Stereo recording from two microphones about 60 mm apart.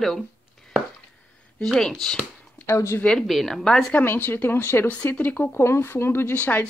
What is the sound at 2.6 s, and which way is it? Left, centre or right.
Speech, left.